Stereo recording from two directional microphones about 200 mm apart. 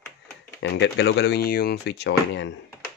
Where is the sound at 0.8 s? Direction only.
60° left (ahead or behind).